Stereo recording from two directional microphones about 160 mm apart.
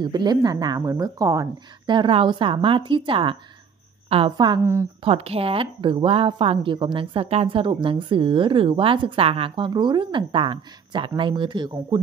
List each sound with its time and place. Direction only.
0.0 s a woman's voice: 25° right (ahead or behind)